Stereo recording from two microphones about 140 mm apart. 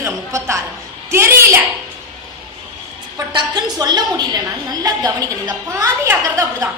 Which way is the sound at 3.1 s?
30° right (ahead or behind).